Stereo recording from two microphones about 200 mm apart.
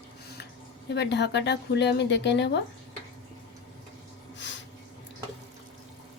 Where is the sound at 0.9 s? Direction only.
60° left (ahead or behind).